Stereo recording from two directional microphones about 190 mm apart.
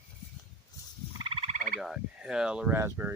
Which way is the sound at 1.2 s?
30° right (ahead or behind).